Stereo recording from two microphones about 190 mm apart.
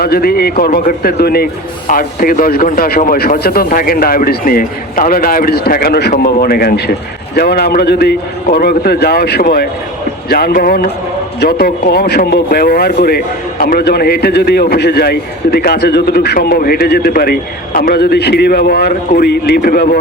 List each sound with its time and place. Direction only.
0.0 s a man's voice: 55° left (ahead or behind)